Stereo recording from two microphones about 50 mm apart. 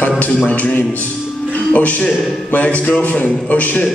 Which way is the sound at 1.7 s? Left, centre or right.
Left.